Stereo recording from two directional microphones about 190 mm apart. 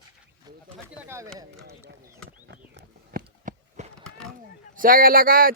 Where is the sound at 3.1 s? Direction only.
40° right (ahead or behind).